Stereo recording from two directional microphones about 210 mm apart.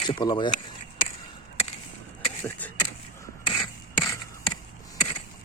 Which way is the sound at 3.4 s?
25° left (ahead or behind).